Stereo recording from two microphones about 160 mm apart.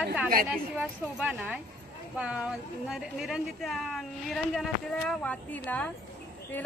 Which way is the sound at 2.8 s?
Centre (ahead or behind).